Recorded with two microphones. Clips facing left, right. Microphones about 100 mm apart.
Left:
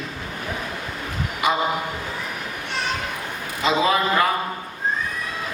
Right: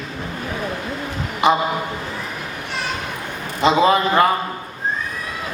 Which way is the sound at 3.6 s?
30° right (ahead or behind).